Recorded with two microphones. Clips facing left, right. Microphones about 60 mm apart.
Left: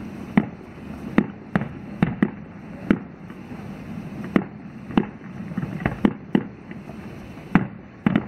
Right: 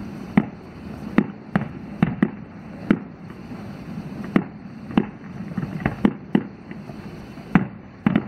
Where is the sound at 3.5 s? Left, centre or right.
Centre.